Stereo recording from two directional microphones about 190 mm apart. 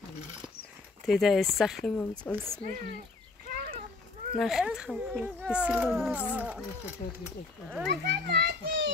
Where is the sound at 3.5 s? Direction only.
50° right (ahead or behind).